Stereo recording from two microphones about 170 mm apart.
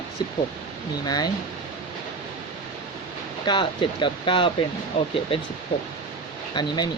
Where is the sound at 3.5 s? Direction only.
30° left (ahead or behind).